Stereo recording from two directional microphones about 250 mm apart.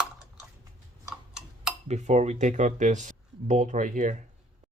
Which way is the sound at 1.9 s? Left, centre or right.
Right.